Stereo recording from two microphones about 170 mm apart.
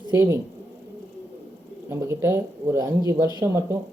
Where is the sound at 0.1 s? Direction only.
15° right (ahead or behind).